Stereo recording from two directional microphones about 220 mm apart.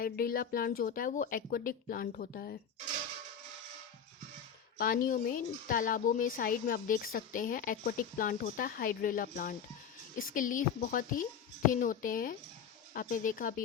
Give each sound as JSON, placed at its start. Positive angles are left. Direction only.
{"t": 0.0, "sound": "speech", "side_deg": 40}
{"t": 4.8, "sound": "speech", "side_deg": 40}